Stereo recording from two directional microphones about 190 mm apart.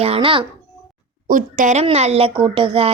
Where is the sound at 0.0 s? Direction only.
30° right (ahead or behind).